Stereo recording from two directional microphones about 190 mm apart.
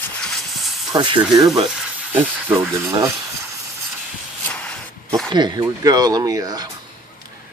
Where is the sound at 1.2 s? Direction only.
Centre (ahead or behind).